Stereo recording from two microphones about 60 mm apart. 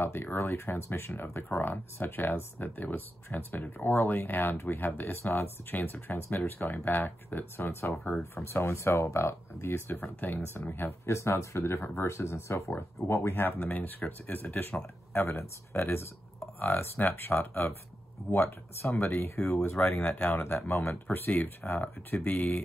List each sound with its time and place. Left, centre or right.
0.0 s speech: left
8.5 s speech: left
11.1 s speech: left
17.3 s speech: left
18.3 s speech: left
19.8 s speech: left